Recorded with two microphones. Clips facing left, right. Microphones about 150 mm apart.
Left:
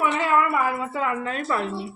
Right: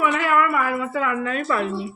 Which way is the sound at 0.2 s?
25° left (ahead or behind).